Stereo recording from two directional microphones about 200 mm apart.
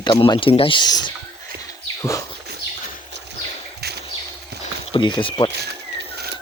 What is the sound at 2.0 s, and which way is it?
Bird, 15° left (ahead or behind).